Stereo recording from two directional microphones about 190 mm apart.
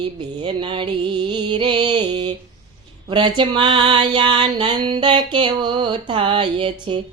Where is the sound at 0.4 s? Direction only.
25° right (ahead or behind).